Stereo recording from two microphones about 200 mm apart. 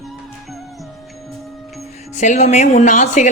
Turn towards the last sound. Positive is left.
turn(degrees=35)  # may be behind; listen again after turning